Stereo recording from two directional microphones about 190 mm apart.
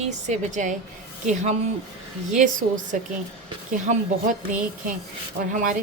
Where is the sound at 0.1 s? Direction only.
40° right (ahead or behind).